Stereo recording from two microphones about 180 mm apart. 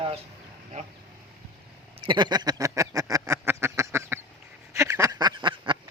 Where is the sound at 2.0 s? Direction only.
25° right (ahead or behind).